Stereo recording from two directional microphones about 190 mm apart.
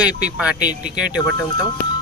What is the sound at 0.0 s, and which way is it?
Speech, 5° right (ahead or behind).